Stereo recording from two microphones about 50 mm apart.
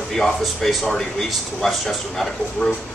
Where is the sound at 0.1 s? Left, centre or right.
Centre.